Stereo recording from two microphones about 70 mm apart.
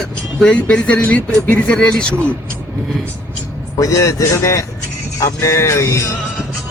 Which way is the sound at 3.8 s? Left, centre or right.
Left.